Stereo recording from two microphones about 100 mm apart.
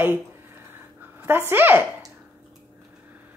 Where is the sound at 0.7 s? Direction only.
20° right (ahead or behind).